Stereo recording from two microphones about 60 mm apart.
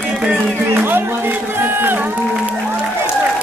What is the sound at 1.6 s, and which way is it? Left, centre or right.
Speech, right.